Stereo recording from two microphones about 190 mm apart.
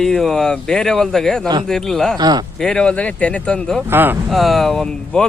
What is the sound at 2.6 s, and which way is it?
Speech, 5° left (ahead or behind).